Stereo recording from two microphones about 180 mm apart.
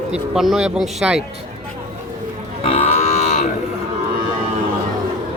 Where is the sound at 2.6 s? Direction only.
30° left (ahead or behind).